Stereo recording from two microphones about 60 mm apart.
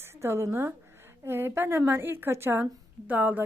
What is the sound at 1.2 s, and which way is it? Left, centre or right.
Speech, right.